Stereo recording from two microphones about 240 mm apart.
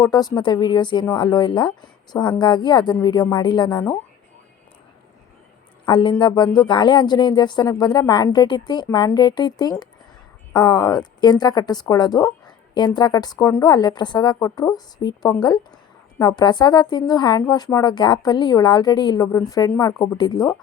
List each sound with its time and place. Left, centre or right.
0.0 s a woman's voice: centre
5.8 s a woman's voice: centre